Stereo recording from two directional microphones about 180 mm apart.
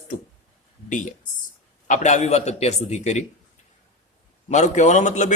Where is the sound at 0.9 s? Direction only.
45° left (ahead or behind).